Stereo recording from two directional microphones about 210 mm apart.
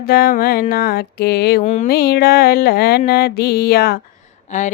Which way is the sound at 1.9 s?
50° left (ahead or behind).